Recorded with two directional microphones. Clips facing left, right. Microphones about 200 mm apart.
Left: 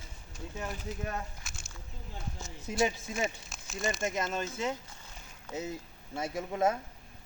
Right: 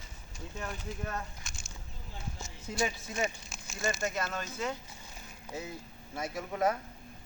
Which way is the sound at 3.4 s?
Centre (ahead or behind).